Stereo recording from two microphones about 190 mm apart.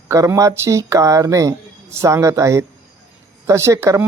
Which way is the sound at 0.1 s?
15° right (ahead or behind).